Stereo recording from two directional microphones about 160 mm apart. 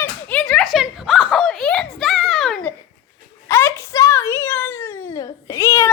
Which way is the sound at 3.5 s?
15° left (ahead or behind).